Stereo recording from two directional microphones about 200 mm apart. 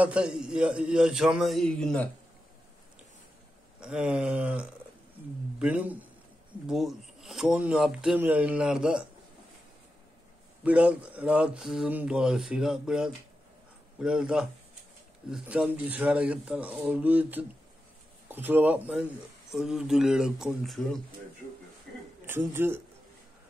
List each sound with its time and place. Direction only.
0.0 s speech: 5° right (ahead or behind)
3.8 s speech: 5° right (ahead or behind)
10.6 s speech: 5° right (ahead or behind)
22.2 s a man's voice: 10° right (ahead or behind)